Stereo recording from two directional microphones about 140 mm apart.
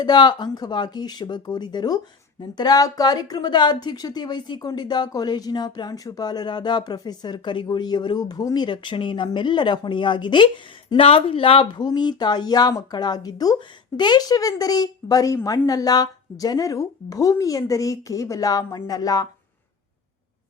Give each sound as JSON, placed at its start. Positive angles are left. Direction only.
{"t": 0.0, "sound": "a woman's voice", "side_deg": 30}